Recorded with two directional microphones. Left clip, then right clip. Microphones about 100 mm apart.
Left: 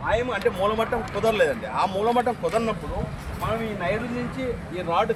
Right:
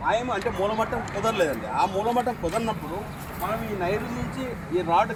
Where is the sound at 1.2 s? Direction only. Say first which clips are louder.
Left 3 dB; 50° left (ahead or behind).